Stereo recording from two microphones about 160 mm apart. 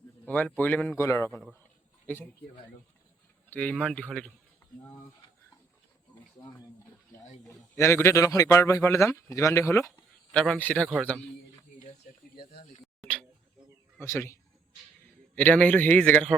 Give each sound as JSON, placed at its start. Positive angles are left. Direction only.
{"t": 0.3, "sound": "a man's voice", "side_deg": 10}
{"t": 3.5, "sound": "a man's voice", "side_deg": 10}
{"t": 7.4, "sound": "a man's voice", "side_deg": 15}
{"t": 10.3, "sound": "a man's voice", "side_deg": 5}
{"t": 12.4, "sound": "speech", "side_deg": 75}
{"t": 14.0, "sound": "a man's voice", "side_deg": 15}
{"t": 15.4, "sound": "a man's voice", "side_deg": 10}